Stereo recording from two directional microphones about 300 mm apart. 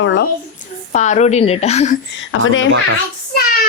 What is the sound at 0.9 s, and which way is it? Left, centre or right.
Speech, left.